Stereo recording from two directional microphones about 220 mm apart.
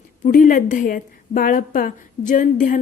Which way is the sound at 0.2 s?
35° left (ahead or behind).